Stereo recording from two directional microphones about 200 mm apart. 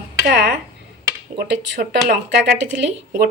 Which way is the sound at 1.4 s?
50° right (ahead or behind).